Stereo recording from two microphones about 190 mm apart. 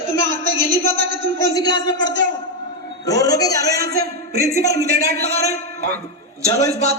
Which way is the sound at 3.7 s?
55° right (ahead or behind).